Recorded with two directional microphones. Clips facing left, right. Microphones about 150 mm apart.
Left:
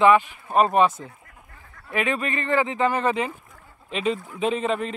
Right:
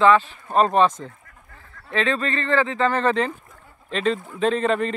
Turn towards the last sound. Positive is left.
turn(degrees=5)  # may be behind; listen again after turning